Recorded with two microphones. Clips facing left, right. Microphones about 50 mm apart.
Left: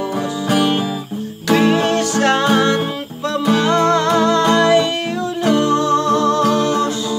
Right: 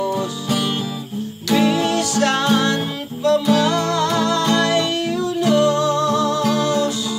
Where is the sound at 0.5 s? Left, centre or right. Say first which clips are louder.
Left 7 dB; left.